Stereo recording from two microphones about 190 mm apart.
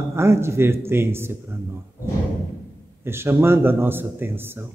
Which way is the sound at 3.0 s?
10° right (ahead or behind).